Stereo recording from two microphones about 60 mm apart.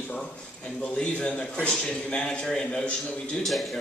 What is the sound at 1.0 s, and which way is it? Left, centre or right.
A man's voice, centre.